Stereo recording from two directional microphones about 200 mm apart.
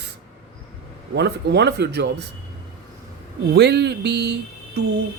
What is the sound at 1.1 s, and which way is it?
Speech, 55° right (ahead or behind).